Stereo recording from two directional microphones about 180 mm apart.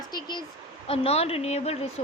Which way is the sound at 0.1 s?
25° left (ahead or behind).